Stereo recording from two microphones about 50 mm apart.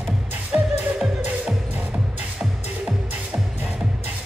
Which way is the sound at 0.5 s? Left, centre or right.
Right.